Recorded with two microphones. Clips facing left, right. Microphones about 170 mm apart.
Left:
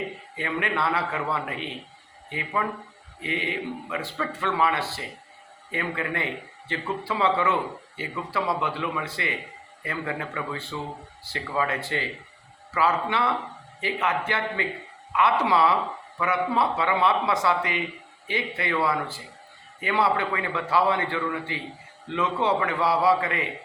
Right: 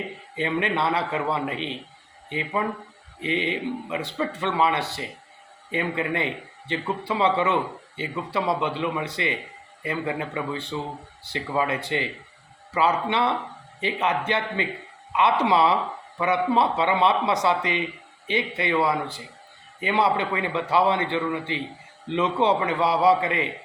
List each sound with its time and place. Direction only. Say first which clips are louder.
0.3 s a man's voice: right 3 dB; 20° right (ahead or behind)